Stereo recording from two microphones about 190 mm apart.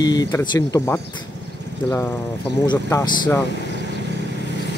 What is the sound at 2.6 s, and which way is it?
Speech, 25° left (ahead or behind).